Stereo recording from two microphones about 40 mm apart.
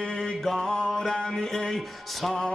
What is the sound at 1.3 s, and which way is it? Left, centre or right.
Speech, centre.